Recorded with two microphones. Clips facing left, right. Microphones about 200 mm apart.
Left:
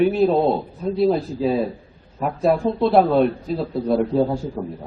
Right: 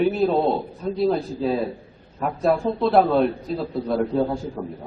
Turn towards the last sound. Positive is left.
turn(degrees=5)  # may be behind; listen again after turning